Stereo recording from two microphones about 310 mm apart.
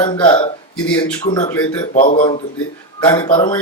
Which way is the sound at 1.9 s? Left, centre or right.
Left.